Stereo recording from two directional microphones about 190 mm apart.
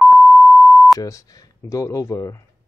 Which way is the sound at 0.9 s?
15° left (ahead or behind).